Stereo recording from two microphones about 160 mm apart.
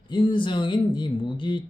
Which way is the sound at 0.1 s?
30° left (ahead or behind).